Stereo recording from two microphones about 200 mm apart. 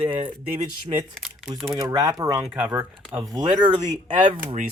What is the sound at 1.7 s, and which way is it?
Speech, 15° right (ahead or behind).